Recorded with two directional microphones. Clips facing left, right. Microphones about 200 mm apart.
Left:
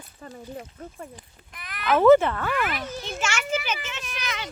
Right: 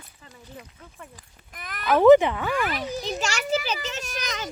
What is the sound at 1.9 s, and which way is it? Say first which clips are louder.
Speech: right 2 dB; 15° right (ahead or behind).